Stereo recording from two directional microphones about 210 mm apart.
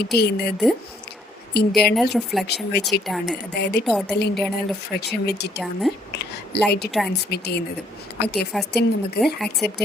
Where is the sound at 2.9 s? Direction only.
50° left (ahead or behind).